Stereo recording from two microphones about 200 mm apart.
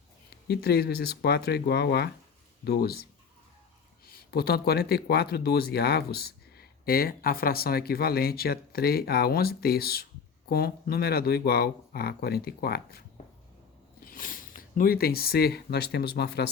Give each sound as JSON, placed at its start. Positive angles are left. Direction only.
{"t": 0.4, "sound": "speech", "side_deg": 50}
{"t": 4.0, "sound": "speech", "side_deg": 50}
{"t": 14.2, "sound": "a sound", "side_deg": 45}
{"t": 14.8, "sound": "speech", "side_deg": 50}